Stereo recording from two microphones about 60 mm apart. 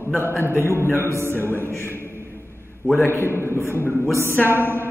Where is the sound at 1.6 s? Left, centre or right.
Left.